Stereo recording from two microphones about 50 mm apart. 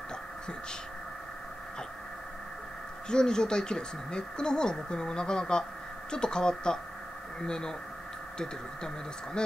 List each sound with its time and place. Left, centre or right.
3.1 s speech: centre